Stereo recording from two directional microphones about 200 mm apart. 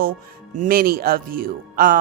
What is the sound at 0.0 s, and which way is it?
Speech, 40° right (ahead or behind).